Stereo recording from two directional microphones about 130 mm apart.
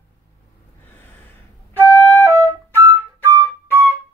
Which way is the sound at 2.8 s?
15° right (ahead or behind).